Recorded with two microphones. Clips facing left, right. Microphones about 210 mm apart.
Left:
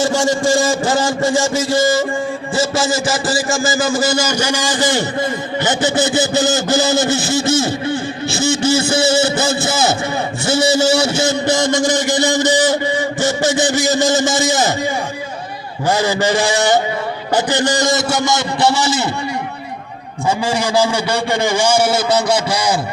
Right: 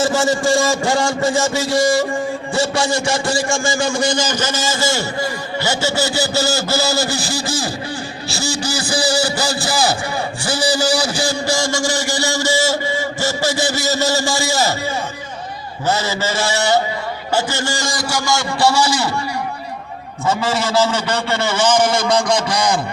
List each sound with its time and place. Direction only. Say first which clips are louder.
0.0 s a man's voice: left 1 dB; centre (ahead or behind); by 5.0 s 15° left (ahead or behind)
5.6 s a sound: left 3 dB; 20° left (ahead or behind)
10.4 s a man's voice: left 5 dB; 25° left (ahead or behind)
15.9 s a man's voice: left 4 dB; 15° left (ahead or behind)
20.2 s a man's voice: left 1 dB; 15° left (ahead or behind)